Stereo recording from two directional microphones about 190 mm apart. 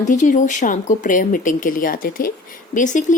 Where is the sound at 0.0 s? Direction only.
40° left (ahead or behind).